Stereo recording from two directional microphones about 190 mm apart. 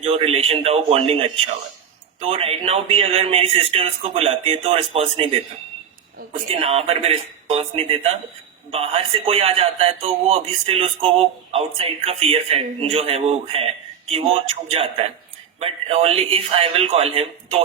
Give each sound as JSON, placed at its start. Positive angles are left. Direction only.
{"t": 0.0, "sound": "a man's voice", "side_deg": -30}
{"t": 2.3, "sound": "a man's voice", "side_deg": -30}
{"t": 6.5, "sound": "a man's voice", "side_deg": -30}